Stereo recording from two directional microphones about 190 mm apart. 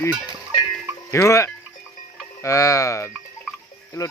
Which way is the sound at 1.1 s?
15° left (ahead or behind).